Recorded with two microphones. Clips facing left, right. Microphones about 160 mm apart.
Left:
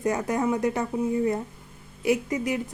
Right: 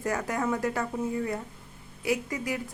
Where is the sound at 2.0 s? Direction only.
20° left (ahead or behind).